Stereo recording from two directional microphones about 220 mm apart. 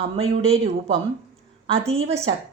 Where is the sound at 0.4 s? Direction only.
25° right (ahead or behind).